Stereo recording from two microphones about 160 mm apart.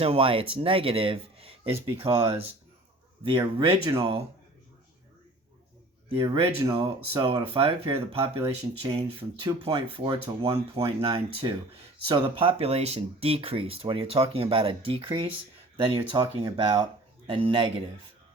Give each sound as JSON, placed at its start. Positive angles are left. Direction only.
{"t": 0.0, "sound": "speech", "side_deg": -35}
{"t": 6.1, "sound": "speech", "side_deg": -35}
{"t": 11.4, "sound": "speech", "side_deg": -25}